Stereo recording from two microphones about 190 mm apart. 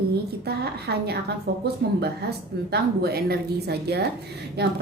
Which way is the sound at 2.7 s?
55° right (ahead or behind).